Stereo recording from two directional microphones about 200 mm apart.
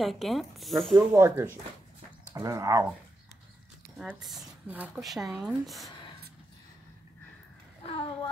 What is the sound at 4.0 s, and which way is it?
Speech, centre (ahead or behind).